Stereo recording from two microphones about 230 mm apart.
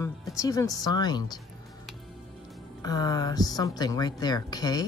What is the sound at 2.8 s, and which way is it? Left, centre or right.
Speech, centre.